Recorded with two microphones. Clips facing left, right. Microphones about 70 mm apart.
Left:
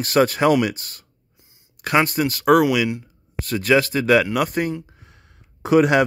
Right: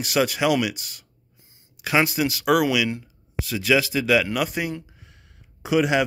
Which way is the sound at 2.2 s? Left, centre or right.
Left.